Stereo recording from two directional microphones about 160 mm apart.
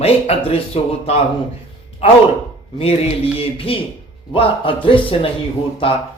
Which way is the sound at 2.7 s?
40° left (ahead or behind).